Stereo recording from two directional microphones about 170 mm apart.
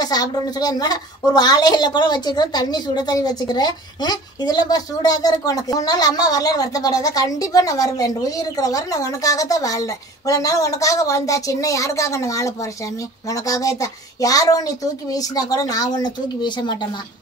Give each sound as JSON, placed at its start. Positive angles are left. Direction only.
{"t": 0.0, "sound": "a woman's voice", "side_deg": 25}